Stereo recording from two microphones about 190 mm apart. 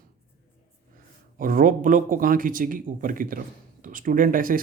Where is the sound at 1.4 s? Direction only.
45° right (ahead or behind).